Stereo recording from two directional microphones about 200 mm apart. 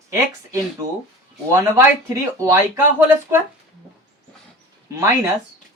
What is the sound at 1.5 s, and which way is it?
Speech, 15° right (ahead or behind).